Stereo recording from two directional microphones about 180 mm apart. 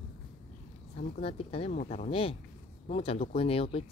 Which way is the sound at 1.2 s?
30° left (ahead or behind).